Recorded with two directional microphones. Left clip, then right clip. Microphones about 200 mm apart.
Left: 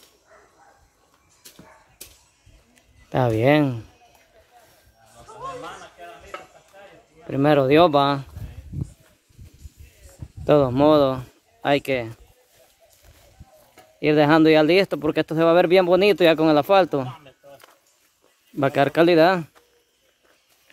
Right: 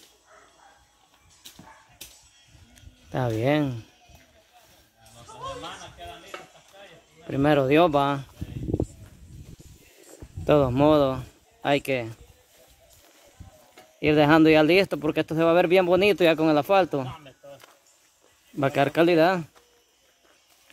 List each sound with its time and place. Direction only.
3.1 s speech: 30° left (ahead or behind)
7.2 s speech: 15° left (ahead or behind)
10.4 s speech: 20° left (ahead or behind)
13.9 s speech: 10° left (ahead or behind); by 17.1 s 30° left (ahead or behind)
18.6 s speech: 20° left (ahead or behind)